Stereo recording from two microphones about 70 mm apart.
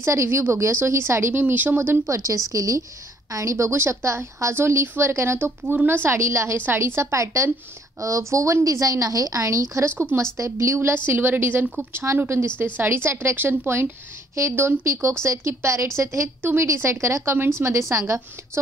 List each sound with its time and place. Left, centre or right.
0.0 s a woman's voice: right
1.4 s speech: right
2.0 s a woman's voice: right
6.6 s a woman's voice: right
15.2 s a woman's voice: right